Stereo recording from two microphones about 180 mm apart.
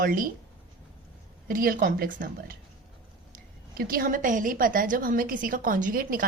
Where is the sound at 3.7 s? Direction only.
55° right (ahead or behind).